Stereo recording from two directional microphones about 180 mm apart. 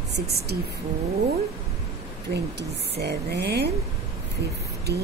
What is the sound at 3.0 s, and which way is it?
Speech, 65° right (ahead or behind).